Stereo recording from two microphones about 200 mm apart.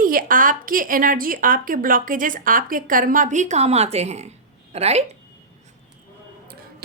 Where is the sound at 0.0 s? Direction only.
45° right (ahead or behind).